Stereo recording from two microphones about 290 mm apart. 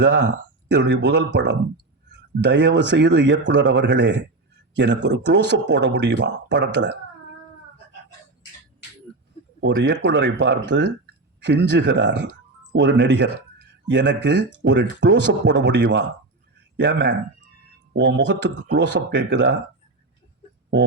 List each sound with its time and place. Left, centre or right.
0.0 s speech: right
9.6 s speech: right